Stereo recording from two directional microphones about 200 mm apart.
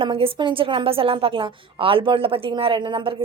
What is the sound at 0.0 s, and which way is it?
A woman's voice, 25° right (ahead or behind).